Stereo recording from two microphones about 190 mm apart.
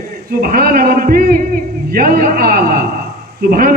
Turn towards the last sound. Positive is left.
turn(degrees=-50)  # may be behind; listen again after turning